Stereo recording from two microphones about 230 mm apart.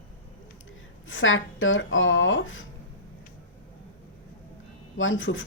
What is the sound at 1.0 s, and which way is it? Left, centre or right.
Speech, left.